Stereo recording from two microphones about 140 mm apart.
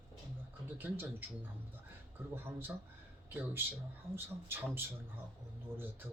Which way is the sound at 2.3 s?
15° right (ahead or behind).